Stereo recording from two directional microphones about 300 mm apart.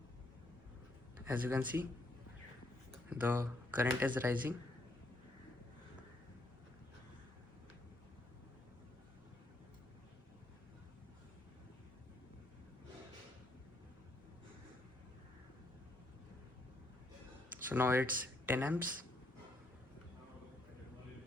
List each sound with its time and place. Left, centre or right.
1.3 s speech: centre
3.1 s speech: centre
17.7 s speech: centre